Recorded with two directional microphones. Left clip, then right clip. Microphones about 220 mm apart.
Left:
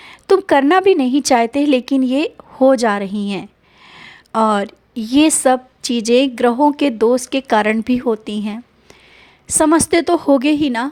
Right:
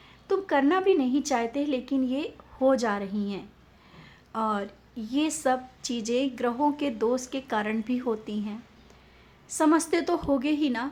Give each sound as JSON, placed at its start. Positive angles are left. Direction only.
{"t": 0.0, "sound": "a woman's voice", "side_deg": 45}